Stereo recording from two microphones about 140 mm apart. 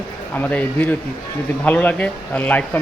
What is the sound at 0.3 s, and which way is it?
Speech, 10° left (ahead or behind).